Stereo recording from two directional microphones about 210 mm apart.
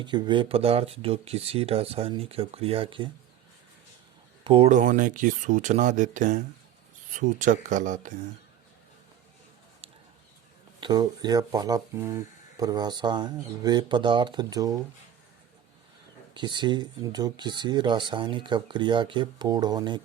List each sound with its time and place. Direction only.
0.0 s speech: 20° right (ahead or behind)
4.4 s speech: 30° right (ahead or behind)
10.8 s speech: 20° right (ahead or behind)
16.3 s speech: 20° right (ahead or behind)